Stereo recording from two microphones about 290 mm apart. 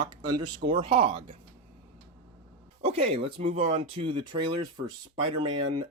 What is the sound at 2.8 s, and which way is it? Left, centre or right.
Speech, centre.